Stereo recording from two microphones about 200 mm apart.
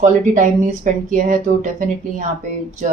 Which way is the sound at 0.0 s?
35° right (ahead or behind).